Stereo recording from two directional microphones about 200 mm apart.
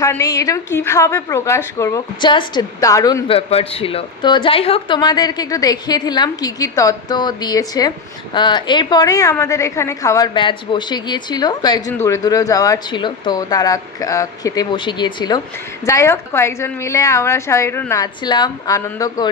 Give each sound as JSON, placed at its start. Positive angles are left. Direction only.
{"t": 0.0, "sound": "a woman's voice", "side_deg": 15}